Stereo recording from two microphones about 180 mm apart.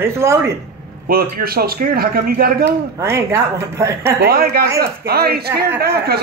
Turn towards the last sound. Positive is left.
turn(degrees=-60)  # may be behind; listen again after turning